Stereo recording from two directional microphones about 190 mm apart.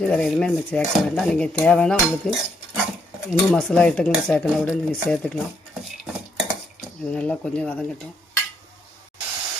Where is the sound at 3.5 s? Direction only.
5° left (ahead or behind).